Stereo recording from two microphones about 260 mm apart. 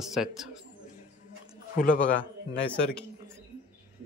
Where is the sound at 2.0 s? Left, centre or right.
Centre.